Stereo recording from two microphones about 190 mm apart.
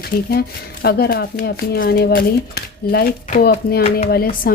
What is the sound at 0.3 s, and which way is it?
A woman's voice, 55° left (ahead or behind).